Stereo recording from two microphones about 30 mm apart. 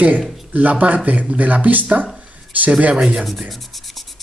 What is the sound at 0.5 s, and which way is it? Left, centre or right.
Speech, right.